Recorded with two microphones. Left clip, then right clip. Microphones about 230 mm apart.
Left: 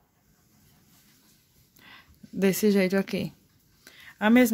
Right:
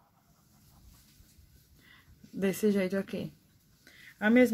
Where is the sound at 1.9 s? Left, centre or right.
Left.